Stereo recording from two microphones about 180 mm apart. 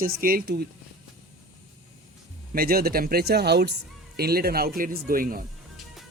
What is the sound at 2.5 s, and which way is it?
A man's voice, 55° right (ahead or behind).